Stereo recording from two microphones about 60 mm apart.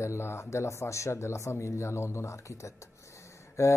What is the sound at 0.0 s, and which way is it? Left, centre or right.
Speech, left.